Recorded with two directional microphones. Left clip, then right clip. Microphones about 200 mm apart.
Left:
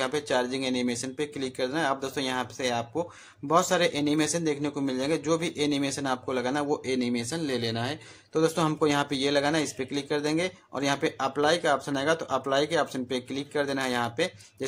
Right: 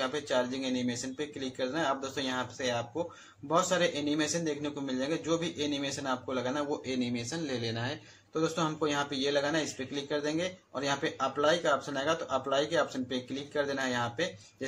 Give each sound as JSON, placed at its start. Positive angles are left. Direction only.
{"t": 0.0, "sound": "speech", "side_deg": 40}